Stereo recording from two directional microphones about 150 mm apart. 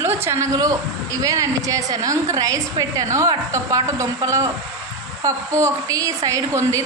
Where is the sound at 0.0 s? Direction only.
15° right (ahead or behind).